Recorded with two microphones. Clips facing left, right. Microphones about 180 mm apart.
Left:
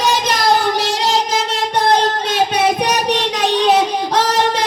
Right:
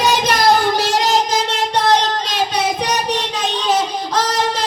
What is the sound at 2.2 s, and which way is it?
Child singing, 60° left (ahead or behind).